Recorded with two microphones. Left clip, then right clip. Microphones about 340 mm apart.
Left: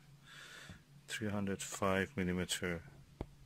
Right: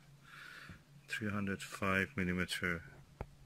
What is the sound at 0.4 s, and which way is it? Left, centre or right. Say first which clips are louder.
Speech: right 1 dB; centre.